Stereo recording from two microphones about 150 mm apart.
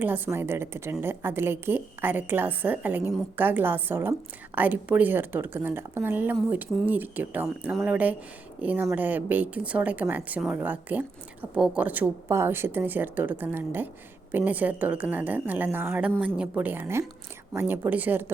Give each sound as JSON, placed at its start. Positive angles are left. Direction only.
{"t": 0.0, "sound": "speech", "side_deg": -15}